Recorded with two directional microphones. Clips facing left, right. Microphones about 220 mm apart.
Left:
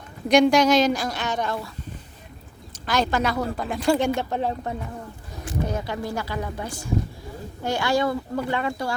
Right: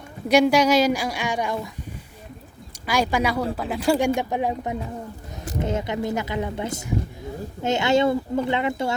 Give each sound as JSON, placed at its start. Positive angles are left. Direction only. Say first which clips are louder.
{"t": 0.3, "sound": "speech", "louder": "even", "side_deg": -5}
{"t": 2.8, "sound": "speech", "louder": "right 1 dB", "side_deg": -10}